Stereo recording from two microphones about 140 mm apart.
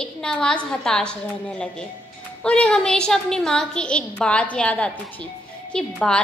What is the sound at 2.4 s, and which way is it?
A woman's voice, 10° left (ahead or behind).